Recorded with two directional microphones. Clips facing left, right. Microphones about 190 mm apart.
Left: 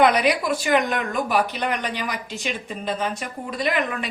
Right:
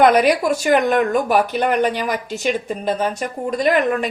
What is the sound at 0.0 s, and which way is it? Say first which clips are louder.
A woman's voice: right 5 dB; 45° right (ahead or behind).